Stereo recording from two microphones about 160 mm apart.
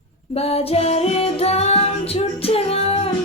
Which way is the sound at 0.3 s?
40° left (ahead or behind).